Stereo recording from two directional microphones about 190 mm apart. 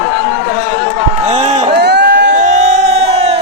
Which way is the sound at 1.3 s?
35° right (ahead or behind).